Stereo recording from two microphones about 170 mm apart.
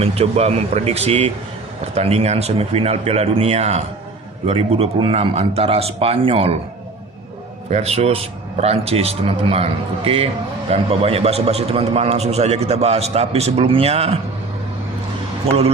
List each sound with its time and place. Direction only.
0.0 s a man's voice: 40° right (ahead or behind)
7.7 s a man's voice: 40° right (ahead or behind)
15.5 s a man's voice: 35° right (ahead or behind)